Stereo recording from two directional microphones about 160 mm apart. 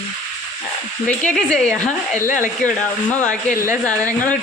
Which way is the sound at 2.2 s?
55° left (ahead or behind).